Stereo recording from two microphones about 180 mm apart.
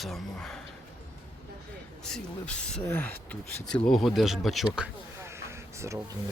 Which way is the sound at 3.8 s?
Centre (ahead or behind).